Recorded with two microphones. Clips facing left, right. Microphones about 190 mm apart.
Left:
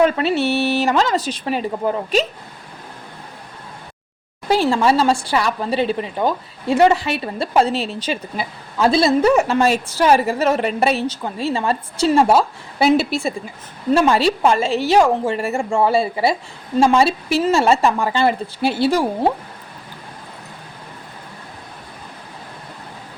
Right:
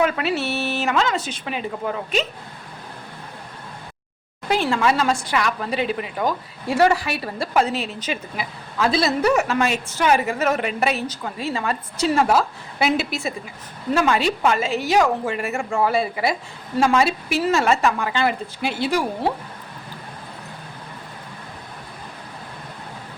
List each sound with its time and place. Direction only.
0.0 s a woman's voice: 30° left (ahead or behind)
4.4 s a woman's voice: 35° left (ahead or behind)